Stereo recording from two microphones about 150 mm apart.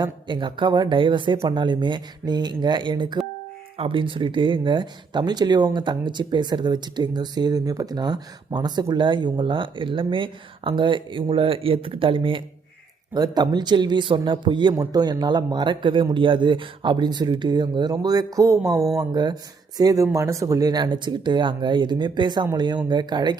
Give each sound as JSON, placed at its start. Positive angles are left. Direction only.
{"t": 0.0, "sound": "speech", "side_deg": -30}